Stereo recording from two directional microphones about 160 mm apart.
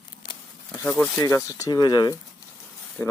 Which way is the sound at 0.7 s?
10° left (ahead or behind).